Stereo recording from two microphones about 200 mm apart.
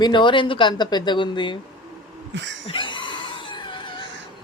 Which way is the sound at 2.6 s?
25° left (ahead or behind).